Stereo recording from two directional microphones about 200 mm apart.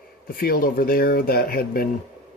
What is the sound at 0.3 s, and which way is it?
Speech, 45° left (ahead or behind).